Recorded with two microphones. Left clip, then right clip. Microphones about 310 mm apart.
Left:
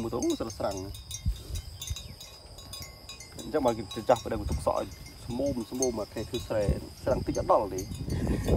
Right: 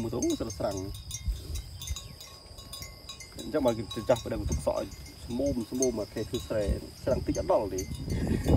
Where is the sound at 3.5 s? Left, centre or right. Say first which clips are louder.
Even; centre.